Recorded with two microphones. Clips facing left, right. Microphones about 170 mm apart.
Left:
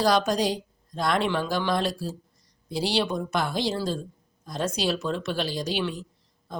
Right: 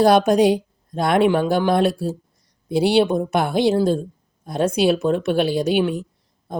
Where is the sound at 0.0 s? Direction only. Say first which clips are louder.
Right 9 dB; 55° right (ahead or behind).